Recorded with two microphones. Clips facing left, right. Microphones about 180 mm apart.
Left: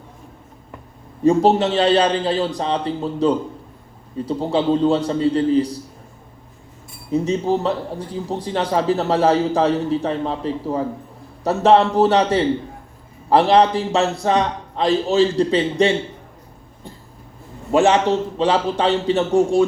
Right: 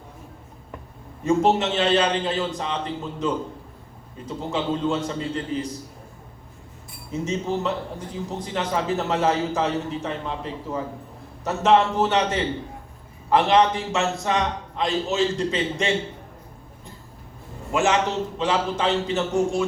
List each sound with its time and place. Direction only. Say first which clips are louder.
1.2 s a man's voice: left 5 dB; 35° left (ahead or behind)
7.1 s a man's voice: left 7 dB; 35° left (ahead or behind)
17.7 s a man's voice: left 7 dB; 35° left (ahead or behind)